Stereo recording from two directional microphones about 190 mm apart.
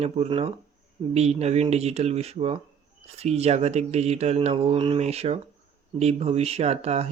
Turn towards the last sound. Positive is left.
turn(degrees=-35)  # may be behind; listen again after turning